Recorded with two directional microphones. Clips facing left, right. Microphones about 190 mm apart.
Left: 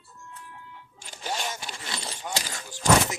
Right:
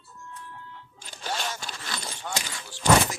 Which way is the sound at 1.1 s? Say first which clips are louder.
Even; 10° left (ahead or behind).